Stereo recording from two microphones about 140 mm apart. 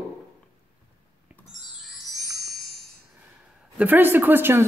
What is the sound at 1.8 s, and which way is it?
Chime, centre (ahead or behind).